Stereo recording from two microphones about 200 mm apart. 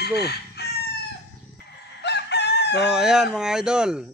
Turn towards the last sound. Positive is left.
turn(degrees=-5)  # may be behind; listen again after turning